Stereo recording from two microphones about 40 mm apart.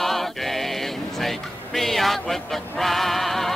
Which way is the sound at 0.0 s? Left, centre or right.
Centre.